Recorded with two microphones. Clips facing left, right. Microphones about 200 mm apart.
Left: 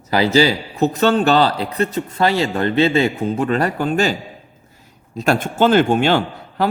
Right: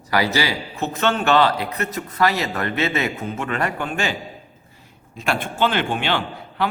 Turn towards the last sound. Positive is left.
turn(degrees=40)  # may be behind; listen again after turning